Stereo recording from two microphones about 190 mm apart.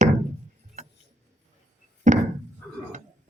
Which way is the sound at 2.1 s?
40° right (ahead or behind).